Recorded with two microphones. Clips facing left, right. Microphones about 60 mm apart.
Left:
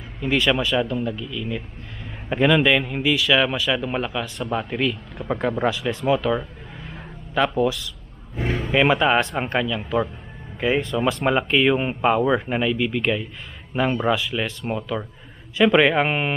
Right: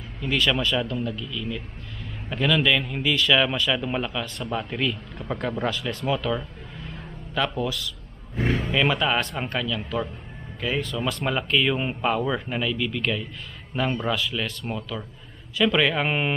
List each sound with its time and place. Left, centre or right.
0.2 s a man's voice: centre
2.2 s a man's voice: left; by 8.7 s centre
8.7 s a man's voice: centre